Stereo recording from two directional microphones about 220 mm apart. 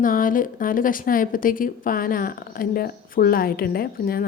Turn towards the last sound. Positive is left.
turn(degrees=40)  # may be behind; listen again after turning